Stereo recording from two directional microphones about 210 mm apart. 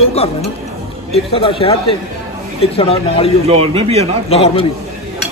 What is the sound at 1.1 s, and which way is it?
A man's voice, 25° left (ahead or behind).